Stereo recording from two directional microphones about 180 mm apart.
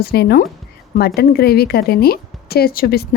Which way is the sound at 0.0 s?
60° left (ahead or behind).